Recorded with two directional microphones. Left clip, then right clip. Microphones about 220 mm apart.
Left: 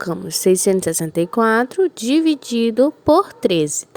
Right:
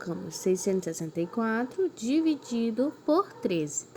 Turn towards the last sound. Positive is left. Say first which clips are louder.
# left 13 dB
turn(degrees=50)  # may be behind; listen again after turning